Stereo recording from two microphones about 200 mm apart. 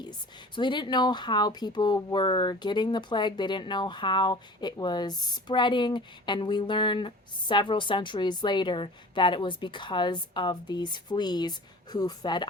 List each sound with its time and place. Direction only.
0.0 s speech: 20° left (ahead or behind)